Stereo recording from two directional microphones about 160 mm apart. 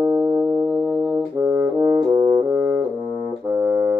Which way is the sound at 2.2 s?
30° right (ahead or behind).